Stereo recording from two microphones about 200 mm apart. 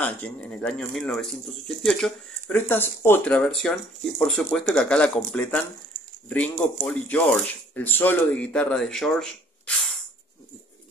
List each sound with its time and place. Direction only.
0.0 s speech: 5° left (ahead or behind)